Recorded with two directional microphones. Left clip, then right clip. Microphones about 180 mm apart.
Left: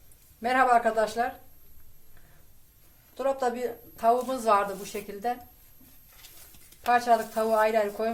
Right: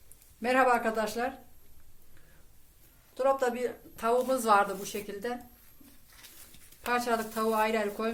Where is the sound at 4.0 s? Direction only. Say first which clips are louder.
Left 3 dB; 40° right (ahead or behind).